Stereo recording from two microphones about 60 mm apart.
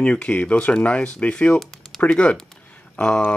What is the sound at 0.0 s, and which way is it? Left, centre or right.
Speech, centre.